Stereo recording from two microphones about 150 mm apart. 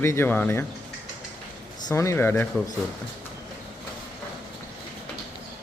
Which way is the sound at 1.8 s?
20° left (ahead or behind).